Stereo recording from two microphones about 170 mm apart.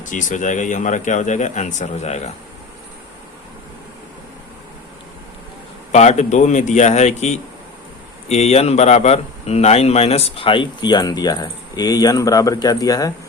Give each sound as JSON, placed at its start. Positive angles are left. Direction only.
{"t": 0.0, "sound": "speech", "side_deg": 50}
{"t": 5.9, "sound": "a man's voice", "side_deg": 40}